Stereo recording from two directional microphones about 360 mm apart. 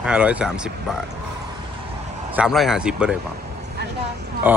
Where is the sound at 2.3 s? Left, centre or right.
Centre.